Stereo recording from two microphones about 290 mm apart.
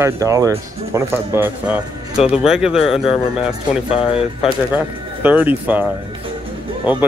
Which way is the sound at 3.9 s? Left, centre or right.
Centre.